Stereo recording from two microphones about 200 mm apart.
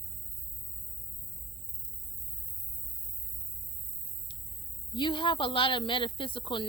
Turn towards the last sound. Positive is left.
turn(degrees=25)  # may be behind; listen again after turning